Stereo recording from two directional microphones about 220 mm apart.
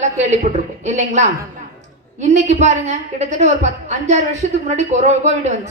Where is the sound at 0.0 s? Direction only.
30° right (ahead or behind).